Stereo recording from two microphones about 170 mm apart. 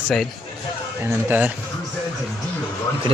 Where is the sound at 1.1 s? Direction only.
10° right (ahead or behind).